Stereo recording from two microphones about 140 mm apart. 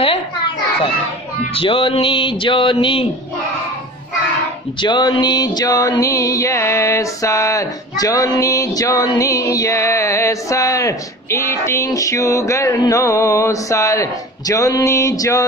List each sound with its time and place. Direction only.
1.5 s music: 40° left (ahead or behind)
4.8 s music: 30° left (ahead or behind)